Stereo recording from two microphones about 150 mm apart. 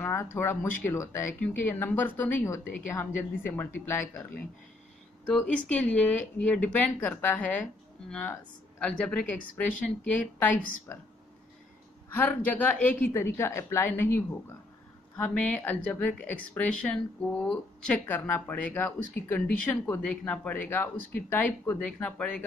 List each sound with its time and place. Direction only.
0.0 s speech: 20° left (ahead or behind)
10.9 s speech: 15° left (ahead or behind)
12.1 s speech: 10° left (ahead or behind)